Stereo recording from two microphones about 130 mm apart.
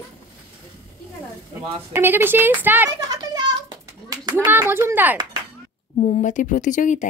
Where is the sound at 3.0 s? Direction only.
30° right (ahead or behind).